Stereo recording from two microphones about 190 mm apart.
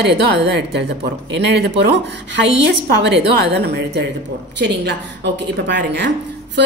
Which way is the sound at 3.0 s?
60° right (ahead or behind).